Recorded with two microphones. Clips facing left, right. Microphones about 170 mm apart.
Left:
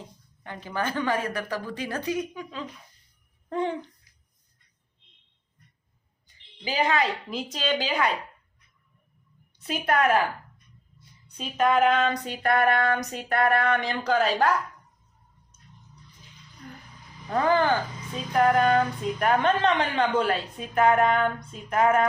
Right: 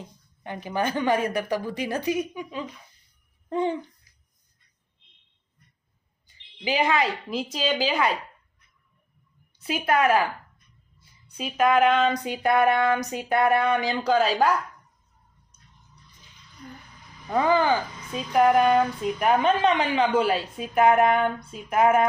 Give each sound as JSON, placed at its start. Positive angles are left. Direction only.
{"t": 0.4, "sound": "a woman's voice", "side_deg": -15}
{"t": 6.7, "sound": "a woman's voice", "side_deg": -15}
{"t": 7.3, "sound": "speech", "side_deg": -5}
{"t": 9.6, "sound": "a woman's voice", "side_deg": -5}
{"t": 17.3, "sound": "a woman's voice", "side_deg": -10}